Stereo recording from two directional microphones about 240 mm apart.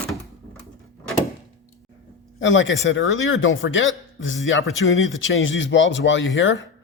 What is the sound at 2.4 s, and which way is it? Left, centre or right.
Speech, left.